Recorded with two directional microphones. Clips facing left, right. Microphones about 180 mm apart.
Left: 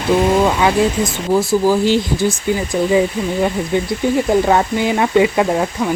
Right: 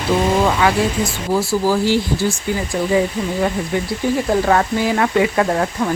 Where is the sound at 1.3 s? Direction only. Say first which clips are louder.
Left 3 dB; 20° left (ahead or behind).